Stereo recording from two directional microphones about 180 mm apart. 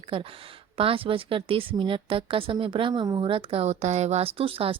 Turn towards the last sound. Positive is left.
turn(degrees=-30)  # may be behind; listen again after turning